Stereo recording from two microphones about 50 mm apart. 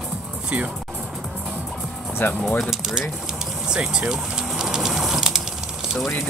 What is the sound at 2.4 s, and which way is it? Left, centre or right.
Speech, centre.